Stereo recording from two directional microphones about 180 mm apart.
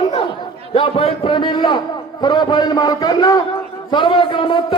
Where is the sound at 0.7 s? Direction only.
30° left (ahead or behind).